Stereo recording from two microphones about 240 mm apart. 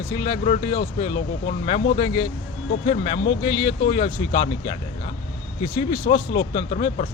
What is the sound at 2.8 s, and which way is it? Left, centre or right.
Speech, left.